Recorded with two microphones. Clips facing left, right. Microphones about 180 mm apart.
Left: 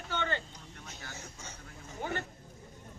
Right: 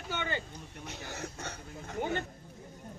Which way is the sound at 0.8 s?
70° right (ahead or behind).